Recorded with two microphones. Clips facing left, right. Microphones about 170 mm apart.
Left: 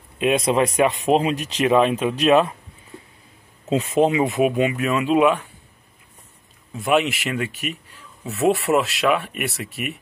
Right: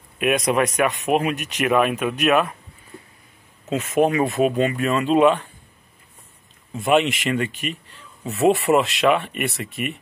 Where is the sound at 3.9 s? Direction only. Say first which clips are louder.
Even; 20° left (ahead or behind).